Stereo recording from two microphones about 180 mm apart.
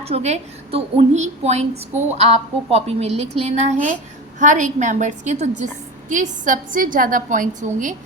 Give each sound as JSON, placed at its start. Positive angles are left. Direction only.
{"t": 0.0, "sound": "a woman's voice", "side_deg": -35}